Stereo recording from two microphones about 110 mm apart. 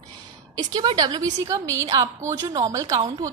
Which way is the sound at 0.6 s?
40° right (ahead or behind).